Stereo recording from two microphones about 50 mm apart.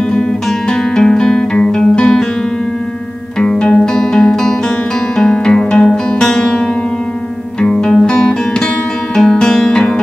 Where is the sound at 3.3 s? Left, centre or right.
Centre.